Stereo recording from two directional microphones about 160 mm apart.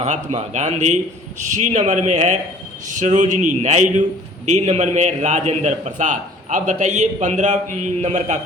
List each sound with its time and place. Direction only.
0.0 s a man's voice: 45° right (ahead or behind)